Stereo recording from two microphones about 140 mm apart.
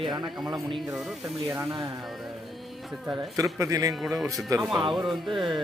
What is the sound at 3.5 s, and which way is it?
Speech, 25° right (ahead or behind).